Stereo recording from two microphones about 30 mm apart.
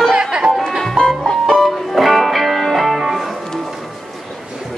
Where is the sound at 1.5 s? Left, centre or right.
Centre.